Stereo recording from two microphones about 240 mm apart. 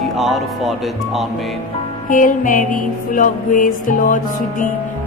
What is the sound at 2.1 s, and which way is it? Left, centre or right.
Music, left.